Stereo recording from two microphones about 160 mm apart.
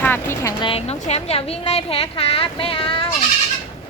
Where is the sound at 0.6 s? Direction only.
35° left (ahead or behind).